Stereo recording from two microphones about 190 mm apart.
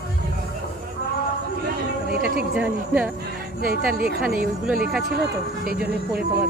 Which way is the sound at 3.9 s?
50° right (ahead or behind).